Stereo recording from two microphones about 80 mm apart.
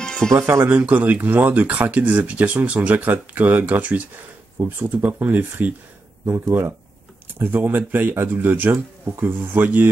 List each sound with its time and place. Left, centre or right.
0.0 s music: centre
0.3 s speech: right
0.7 s speech: right
7.3 s speech: right